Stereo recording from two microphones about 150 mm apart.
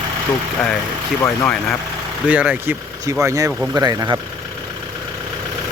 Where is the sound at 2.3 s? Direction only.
10° right (ahead or behind).